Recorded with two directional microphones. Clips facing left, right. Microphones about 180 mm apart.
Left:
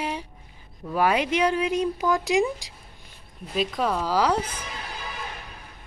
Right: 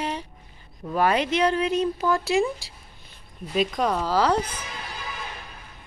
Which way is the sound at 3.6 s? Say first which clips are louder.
Right 2 dB; 5° left (ahead or behind).